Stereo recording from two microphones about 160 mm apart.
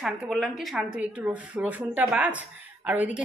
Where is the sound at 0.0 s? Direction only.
Centre (ahead or behind).